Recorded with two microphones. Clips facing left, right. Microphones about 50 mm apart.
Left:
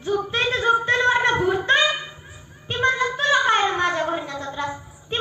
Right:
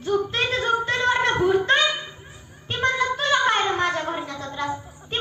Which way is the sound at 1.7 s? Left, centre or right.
Centre.